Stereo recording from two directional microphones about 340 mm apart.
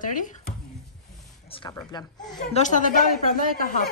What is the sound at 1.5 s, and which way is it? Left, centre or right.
A woman's voice, centre.